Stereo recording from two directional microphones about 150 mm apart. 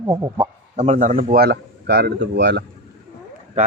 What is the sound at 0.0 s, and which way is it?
Speech, 25° right (ahead or behind).